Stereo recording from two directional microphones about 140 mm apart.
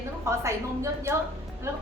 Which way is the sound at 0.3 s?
20° right (ahead or behind).